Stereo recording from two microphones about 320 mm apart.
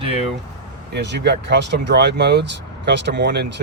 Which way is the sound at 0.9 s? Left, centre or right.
Right.